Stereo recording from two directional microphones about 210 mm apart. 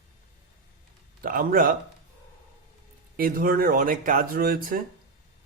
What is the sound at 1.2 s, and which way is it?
Speech, 40° right (ahead or behind).